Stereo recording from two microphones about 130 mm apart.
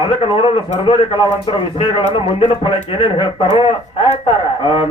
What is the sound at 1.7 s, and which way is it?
Speech, 45° left (ahead or behind).